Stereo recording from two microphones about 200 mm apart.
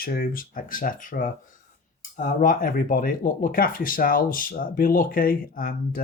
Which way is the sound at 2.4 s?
45° left (ahead or behind).